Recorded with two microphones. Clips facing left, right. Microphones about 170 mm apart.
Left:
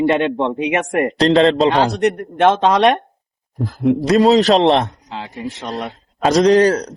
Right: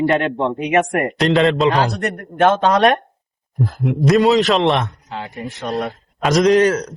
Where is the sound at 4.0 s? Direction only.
40° left (ahead or behind).